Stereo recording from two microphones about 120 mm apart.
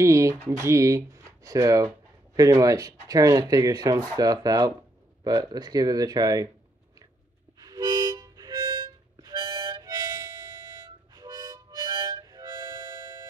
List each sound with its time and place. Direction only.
0.0 s speech: 25° right (ahead or behind)
7.6 s harmonica: 35° right (ahead or behind)